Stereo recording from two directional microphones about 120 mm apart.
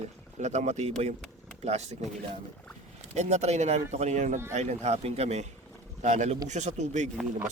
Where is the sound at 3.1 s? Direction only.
70° right (ahead or behind).